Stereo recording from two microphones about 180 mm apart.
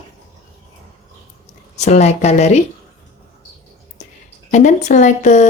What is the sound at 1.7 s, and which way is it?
Speech, 40° left (ahead or behind).